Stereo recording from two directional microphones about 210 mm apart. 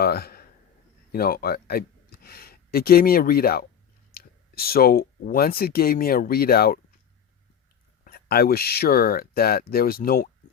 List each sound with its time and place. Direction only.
0.0 s a man's voice: 45° left (ahead or behind)
8.0 s speech: 50° left (ahead or behind)